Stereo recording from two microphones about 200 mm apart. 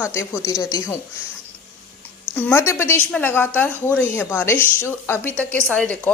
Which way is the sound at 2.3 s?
10° left (ahead or behind).